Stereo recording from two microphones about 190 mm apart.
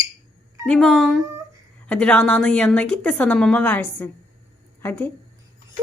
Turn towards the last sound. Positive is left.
turn(degrees=10)  # may be behind; listen again after turning